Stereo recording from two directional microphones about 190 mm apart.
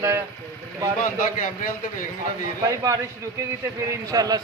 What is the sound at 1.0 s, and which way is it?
A man's voice, 45° left (ahead or behind).